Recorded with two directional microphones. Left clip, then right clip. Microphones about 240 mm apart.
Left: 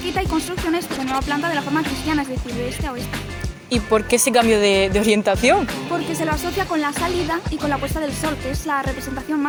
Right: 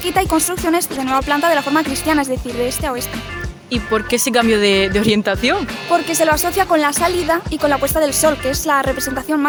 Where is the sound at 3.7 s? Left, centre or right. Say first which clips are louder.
Even; centre.